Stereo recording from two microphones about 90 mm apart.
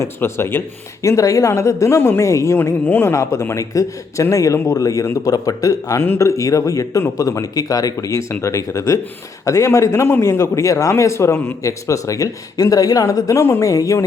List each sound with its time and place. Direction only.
0.0 s speech: 30° left (ahead or behind)
1.0 s a man's voice: 40° left (ahead or behind)
2.6 s a man's voice: 20° left (ahead or behind); by 6.0 s 40° left (ahead or behind)
6.0 s a man's voice: 30° left (ahead or behind)